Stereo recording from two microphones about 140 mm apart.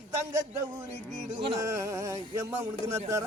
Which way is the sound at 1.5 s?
20° right (ahead or behind).